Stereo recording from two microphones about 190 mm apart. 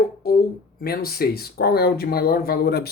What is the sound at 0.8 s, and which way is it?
Speech, 55° left (ahead or behind).